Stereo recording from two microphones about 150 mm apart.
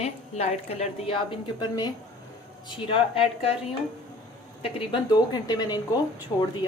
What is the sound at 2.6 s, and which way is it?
Speech, 35° left (ahead or behind).